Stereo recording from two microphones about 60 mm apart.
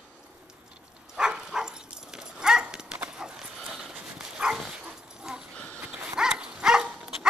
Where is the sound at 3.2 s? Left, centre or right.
Centre.